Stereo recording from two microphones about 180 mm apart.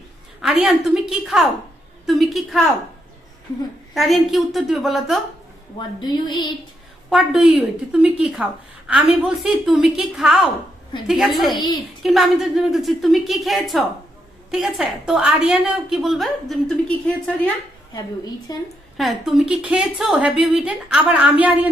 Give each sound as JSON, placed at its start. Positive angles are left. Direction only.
{"t": 0.4, "sound": "a woman's voice", "side_deg": 0}
{"t": 3.9, "sound": "a woman's voice", "side_deg": 0}
{"t": 6.0, "sound": "speech", "side_deg": 25}
{"t": 7.1, "sound": "a woman's voice", "side_deg": 0}
{"t": 18.5, "sound": "speech", "side_deg": 20}
{"t": 18.9, "sound": "a woman's voice", "side_deg": 0}